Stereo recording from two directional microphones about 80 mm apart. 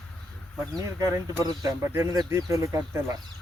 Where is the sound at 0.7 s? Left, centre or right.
Right.